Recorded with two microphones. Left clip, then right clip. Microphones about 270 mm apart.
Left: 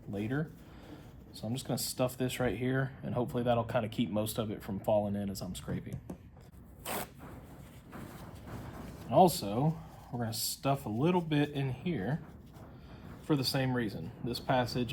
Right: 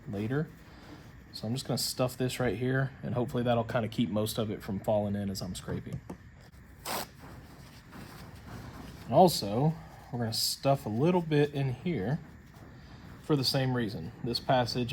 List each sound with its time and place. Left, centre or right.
0.1 s speech: right
6.8 s zipper: right
9.0 s speech: right
13.2 s speech: right